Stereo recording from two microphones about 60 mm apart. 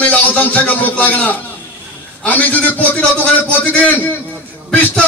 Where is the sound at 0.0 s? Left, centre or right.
Left.